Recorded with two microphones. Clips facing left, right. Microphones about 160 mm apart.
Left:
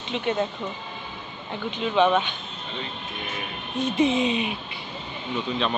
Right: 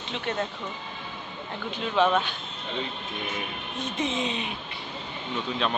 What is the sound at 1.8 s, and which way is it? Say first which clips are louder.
Speech: left 3 dB; 5° left (ahead or behind).